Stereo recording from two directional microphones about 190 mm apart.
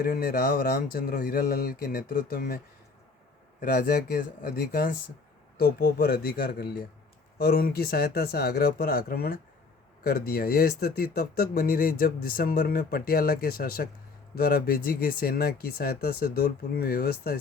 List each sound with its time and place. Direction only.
0.0 s speech: 50° left (ahead or behind)
3.6 s speech: 45° left (ahead or behind)